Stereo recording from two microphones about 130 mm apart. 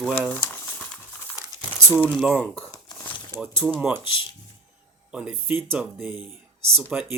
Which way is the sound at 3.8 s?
15° right (ahead or behind).